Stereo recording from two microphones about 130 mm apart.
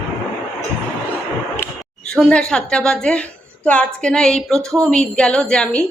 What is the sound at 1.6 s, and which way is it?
A woman's voice, 5° left (ahead or behind).